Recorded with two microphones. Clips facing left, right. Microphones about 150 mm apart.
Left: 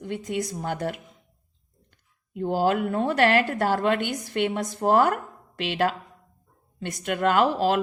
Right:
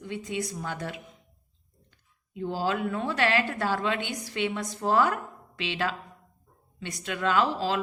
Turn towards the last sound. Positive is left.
turn(degrees=55)  # may be behind; listen again after turning